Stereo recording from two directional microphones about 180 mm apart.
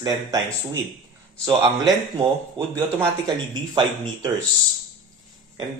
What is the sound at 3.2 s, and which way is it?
Speech, 25° right (ahead or behind).